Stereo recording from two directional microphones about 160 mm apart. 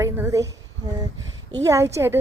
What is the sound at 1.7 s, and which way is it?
Speech, 20° right (ahead or behind).